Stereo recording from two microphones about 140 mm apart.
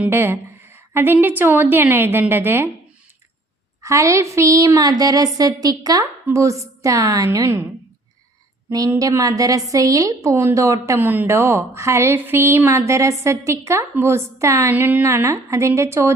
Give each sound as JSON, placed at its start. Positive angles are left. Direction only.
{"t": 0.0, "sound": "a woman's voice", "side_deg": -15}
{"t": 3.8, "sound": "a woman's voice", "side_deg": -20}
{"t": 8.9, "sound": "a woman's voice", "side_deg": -25}